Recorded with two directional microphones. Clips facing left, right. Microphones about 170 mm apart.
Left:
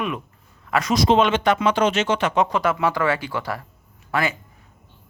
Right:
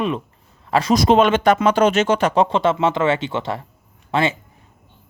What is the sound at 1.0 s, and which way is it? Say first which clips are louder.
Speech: right 2 dB; 50° right (ahead or behind).